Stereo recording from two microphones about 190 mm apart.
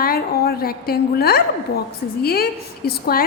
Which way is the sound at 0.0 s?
50° left (ahead or behind).